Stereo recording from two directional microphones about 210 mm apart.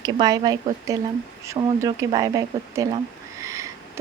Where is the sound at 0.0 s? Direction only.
20° right (ahead or behind).